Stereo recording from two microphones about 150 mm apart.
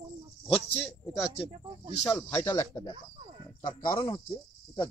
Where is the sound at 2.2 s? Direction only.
20° left (ahead or behind).